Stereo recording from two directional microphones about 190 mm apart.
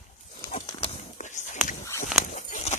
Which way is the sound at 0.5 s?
35° left (ahead or behind).